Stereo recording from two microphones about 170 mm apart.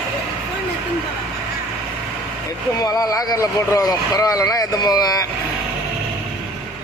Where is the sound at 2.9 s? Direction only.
20° left (ahead or behind).